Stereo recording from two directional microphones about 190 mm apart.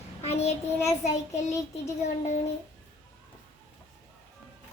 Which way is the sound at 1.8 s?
35° left (ahead or behind).